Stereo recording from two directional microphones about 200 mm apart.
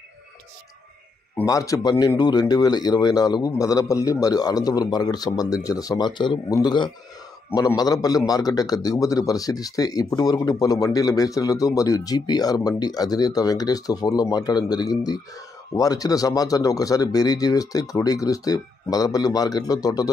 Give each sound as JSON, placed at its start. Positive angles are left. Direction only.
{"t": 1.4, "sound": "a man's voice", "side_deg": 15}